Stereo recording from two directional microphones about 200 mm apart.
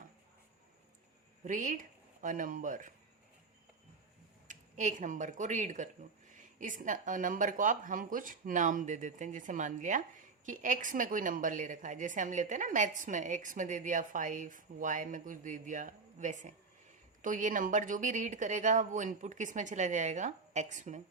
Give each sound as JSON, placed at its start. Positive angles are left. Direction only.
{"t": 1.5, "sound": "speech", "side_deg": -40}
{"t": 4.4, "sound": "speech", "side_deg": -40}